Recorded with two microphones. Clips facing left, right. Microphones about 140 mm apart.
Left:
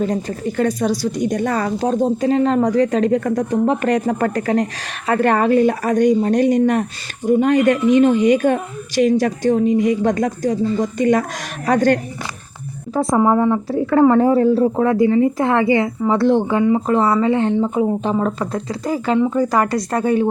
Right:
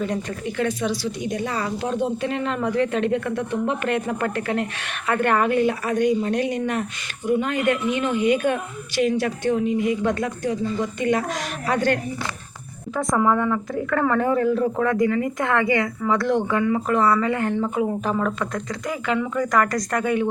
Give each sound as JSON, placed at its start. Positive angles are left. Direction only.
{"t": 0.0, "sound": "speech", "side_deg": 35}
{"t": 12.9, "sound": "speech", "side_deg": 30}